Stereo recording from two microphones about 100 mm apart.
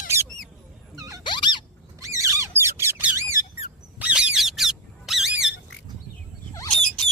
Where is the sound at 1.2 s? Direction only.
50° left (ahead or behind).